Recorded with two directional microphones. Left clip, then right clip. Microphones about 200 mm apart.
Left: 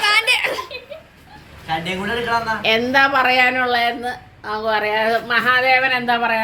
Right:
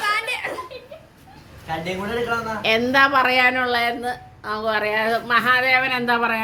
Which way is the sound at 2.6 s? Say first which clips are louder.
Even; centre (ahead or behind).